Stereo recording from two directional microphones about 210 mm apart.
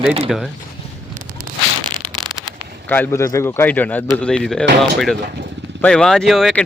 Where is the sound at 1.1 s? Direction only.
40° right (ahead or behind).